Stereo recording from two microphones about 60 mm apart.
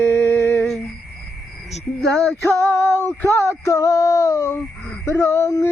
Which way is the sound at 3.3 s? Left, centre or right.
Left.